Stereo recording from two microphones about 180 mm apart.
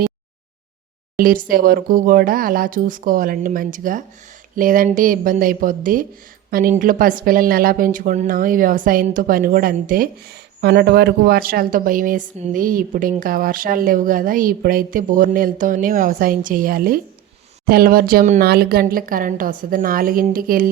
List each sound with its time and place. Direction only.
1.1 s a woman's voice: 50° right (ahead or behind)